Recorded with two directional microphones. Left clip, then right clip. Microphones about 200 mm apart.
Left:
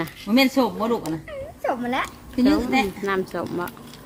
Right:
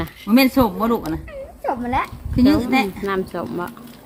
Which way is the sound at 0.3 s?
25° right (ahead or behind).